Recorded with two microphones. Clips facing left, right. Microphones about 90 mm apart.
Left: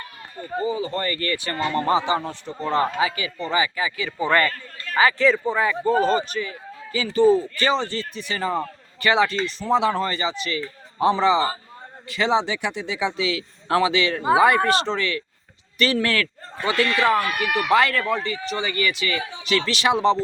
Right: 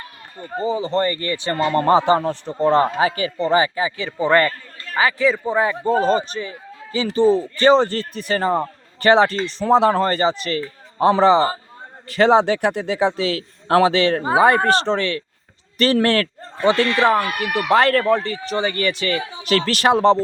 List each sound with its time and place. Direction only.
0.3 s a man's voice: 30° right (ahead or behind)
1.6 s speech: 40° right (ahead or behind); by 4.5 s 20° right (ahead or behind)
5.1 s speech: 10° right (ahead or behind)
5.5 s a man's voice: 25° right (ahead or behind)
7.8 s a man's voice: 50° right (ahead or behind)